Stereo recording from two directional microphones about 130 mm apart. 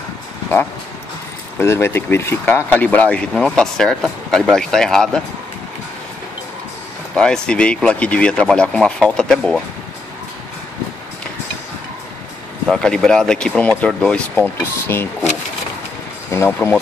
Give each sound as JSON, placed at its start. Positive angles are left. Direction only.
{"t": 1.6, "sound": "speech", "side_deg": 20}
{"t": 7.2, "sound": "speech", "side_deg": 5}
{"t": 12.6, "sound": "speech", "side_deg": 5}
{"t": 16.3, "sound": "speech", "side_deg": 20}